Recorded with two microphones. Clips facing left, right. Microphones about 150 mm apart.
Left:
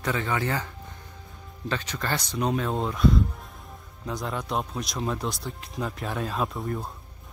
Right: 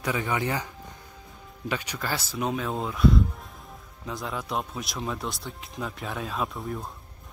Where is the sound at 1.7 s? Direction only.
10° right (ahead or behind).